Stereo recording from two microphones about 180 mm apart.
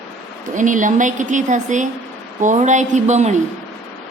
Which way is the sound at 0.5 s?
45° right (ahead or behind).